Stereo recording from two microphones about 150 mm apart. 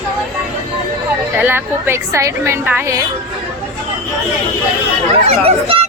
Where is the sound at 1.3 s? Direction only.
15° right (ahead or behind).